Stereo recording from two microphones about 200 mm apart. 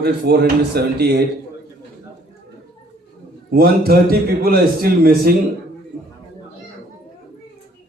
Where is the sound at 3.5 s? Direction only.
50° right (ahead or behind).